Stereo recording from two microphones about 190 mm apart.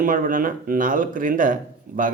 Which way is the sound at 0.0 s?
45° right (ahead or behind).